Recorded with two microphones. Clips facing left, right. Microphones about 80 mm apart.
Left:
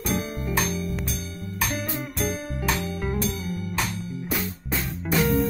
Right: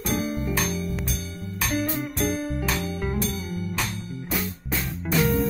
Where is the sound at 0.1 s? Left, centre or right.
Centre.